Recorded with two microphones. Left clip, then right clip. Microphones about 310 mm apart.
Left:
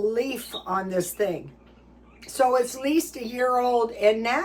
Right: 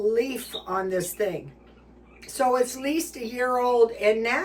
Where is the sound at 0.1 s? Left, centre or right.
Centre.